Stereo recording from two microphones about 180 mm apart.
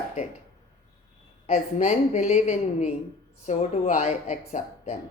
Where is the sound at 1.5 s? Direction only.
40° left (ahead or behind).